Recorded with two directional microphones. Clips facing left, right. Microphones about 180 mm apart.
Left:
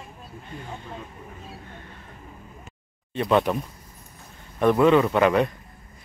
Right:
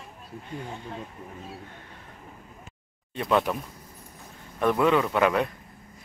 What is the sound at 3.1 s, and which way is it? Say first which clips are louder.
Speech: left 3 dB; centre (ahead or behind).